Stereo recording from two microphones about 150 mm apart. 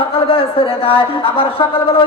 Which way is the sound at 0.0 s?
35° left (ahead or behind).